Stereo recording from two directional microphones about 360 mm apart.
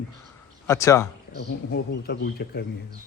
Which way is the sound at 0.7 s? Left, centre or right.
Centre.